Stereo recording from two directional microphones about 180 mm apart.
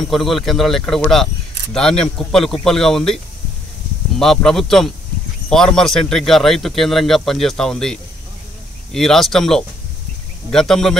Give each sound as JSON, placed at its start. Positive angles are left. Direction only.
{"t": 0.0, "sound": "speech", "side_deg": 0}
{"t": 4.2, "sound": "speech", "side_deg": 5}